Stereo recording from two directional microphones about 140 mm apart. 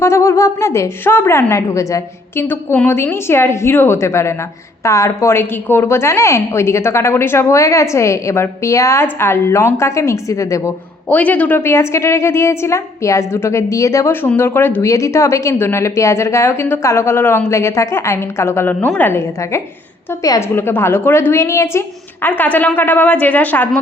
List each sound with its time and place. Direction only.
0.0 s a woman's voice: 20° left (ahead or behind)
11.1 s a woman's voice: 10° left (ahead or behind)